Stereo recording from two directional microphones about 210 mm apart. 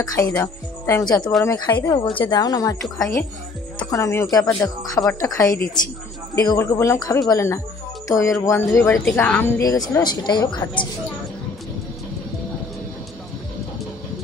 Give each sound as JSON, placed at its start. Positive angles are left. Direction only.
{"t": 0.0, "sound": "a woman's voice", "side_deg": 15}